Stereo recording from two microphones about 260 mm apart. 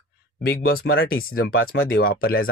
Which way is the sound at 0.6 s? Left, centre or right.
Left.